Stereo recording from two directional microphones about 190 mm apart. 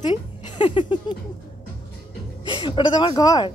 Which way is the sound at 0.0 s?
25° left (ahead or behind).